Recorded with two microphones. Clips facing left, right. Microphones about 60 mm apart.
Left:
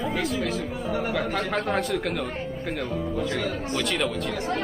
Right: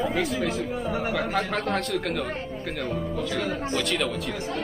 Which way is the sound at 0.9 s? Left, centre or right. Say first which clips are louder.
Left 2 dB; centre.